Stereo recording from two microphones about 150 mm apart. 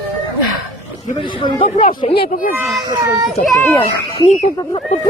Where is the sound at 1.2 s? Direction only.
35° left (ahead or behind).